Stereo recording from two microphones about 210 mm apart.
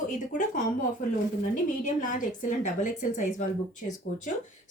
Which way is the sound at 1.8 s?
35° left (ahead or behind).